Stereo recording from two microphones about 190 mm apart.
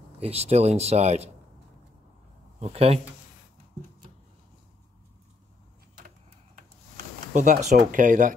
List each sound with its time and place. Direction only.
0.2 s speech: 35° right (ahead or behind)
2.6 s speech: 30° right (ahead or behind)
7.0 s speech: 40° right (ahead or behind)